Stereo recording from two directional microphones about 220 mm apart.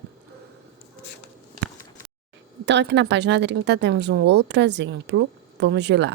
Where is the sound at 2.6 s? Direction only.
50° right (ahead or behind).